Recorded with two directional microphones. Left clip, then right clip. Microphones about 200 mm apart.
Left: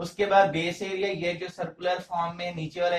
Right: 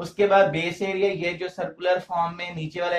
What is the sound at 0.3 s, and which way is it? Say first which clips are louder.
Speech: right 1 dB; 40° right (ahead or behind).